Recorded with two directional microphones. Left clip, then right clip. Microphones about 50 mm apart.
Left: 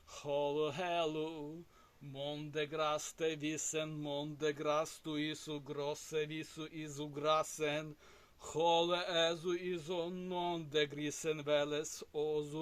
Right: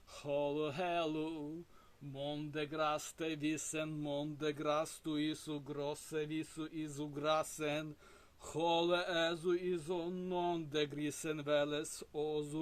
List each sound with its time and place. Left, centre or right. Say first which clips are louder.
0.3 s speech: left 1 dB; centre